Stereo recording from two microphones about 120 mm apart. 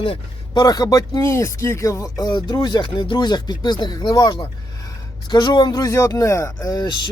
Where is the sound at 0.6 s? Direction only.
30° left (ahead or behind).